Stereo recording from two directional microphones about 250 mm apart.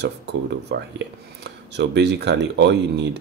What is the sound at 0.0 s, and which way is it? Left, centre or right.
Speech, right.